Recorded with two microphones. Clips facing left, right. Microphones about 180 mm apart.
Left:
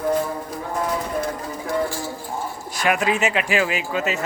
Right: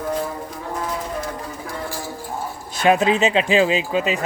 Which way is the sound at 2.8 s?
25° right (ahead or behind).